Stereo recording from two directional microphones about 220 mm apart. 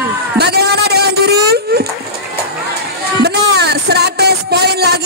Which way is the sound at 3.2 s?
50° right (ahead or behind).